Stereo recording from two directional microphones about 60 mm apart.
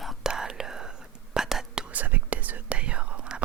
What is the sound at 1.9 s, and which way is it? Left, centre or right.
Whispering, right.